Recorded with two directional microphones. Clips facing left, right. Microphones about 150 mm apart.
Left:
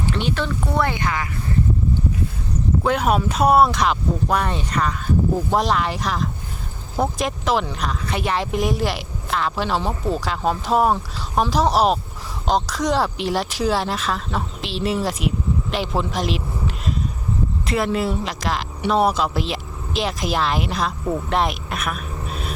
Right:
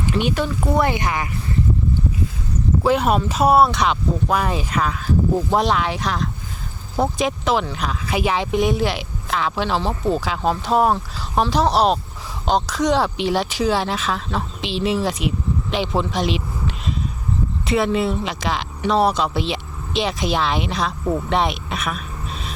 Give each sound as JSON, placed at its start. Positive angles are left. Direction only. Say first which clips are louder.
{"t": 0.0, "sound": "speech", "louder": "right 2 dB", "side_deg": -15}
{"t": 2.8, "sound": "speech", "louder": "right 2 dB", "side_deg": 0}
{"t": 15.7, "sound": "a sound", "louder": "right 4 dB", "side_deg": 0}
{"t": 17.7, "sound": "speech", "louder": "right 3 dB", "side_deg": 0}